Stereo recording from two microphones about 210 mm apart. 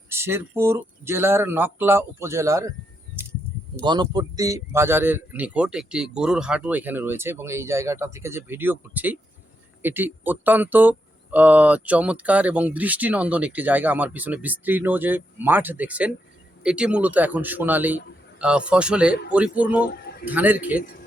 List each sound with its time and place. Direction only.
0.1 s speech: 10° right (ahead or behind)
3.8 s speech: 20° right (ahead or behind)
19.9 s a sound: 50° left (ahead or behind)
20.3 s speech: 10° right (ahead or behind)
20.7 s a man's voice: 40° left (ahead or behind)